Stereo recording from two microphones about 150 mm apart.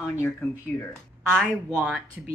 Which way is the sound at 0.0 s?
15° left (ahead or behind).